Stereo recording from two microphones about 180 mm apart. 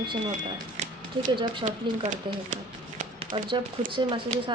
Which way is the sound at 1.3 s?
25° right (ahead or behind).